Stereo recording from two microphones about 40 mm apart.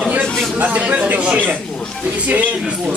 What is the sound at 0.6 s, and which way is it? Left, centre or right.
A man's voice, right.